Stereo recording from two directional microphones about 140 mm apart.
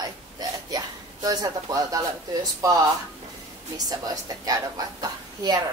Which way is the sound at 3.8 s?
25° right (ahead or behind).